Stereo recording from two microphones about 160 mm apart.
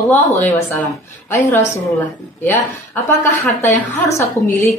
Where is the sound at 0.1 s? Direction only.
10° left (ahead or behind).